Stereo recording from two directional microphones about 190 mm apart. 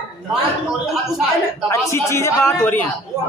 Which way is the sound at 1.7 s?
15° left (ahead or behind).